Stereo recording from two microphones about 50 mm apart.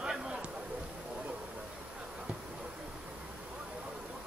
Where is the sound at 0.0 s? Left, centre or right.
Centre.